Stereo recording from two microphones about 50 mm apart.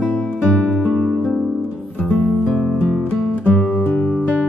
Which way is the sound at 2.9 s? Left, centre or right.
Centre.